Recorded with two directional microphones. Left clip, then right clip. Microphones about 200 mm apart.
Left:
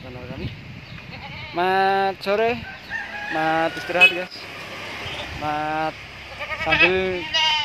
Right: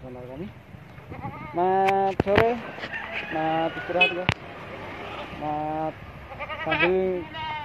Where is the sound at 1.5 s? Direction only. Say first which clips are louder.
Left 2 dB; 10° left (ahead or behind).